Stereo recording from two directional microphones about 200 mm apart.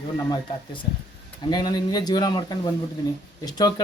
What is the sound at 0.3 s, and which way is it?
Speech, 25° left (ahead or behind).